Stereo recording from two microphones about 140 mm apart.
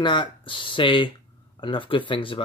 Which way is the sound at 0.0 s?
35° left (ahead or behind).